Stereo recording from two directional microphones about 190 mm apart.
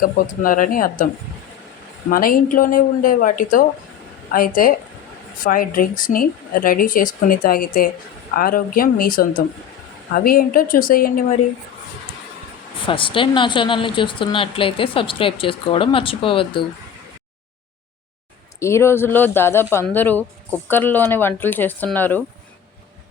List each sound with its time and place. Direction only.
0.0 s speech: 45° left (ahead or behind)
2.0 s speech: 50° left (ahead or behind)
12.8 s speech: 25° left (ahead or behind)
18.6 s speech: 15° left (ahead or behind)